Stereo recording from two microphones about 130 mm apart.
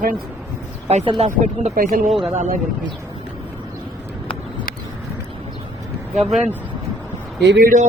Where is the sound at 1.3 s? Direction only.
85° right.